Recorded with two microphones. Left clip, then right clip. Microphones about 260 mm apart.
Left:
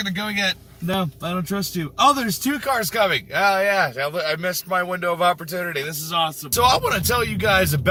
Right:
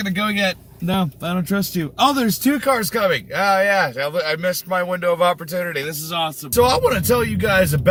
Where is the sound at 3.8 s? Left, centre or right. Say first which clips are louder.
Right 2 dB; centre.